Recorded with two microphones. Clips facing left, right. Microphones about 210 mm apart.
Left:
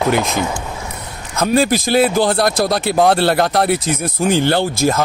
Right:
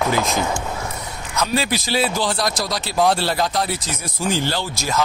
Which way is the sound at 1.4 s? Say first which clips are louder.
Left 7 dB; 50° left (ahead or behind).